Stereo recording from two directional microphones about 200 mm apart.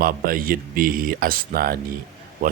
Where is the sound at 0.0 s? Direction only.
45° right (ahead or behind).